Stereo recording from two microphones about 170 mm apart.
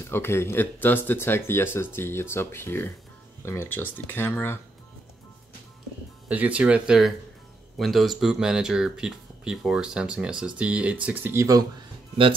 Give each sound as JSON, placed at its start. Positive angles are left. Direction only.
{"t": 0.0, "sound": "speech", "side_deg": 15}
{"t": 6.2, "sound": "speech", "side_deg": -10}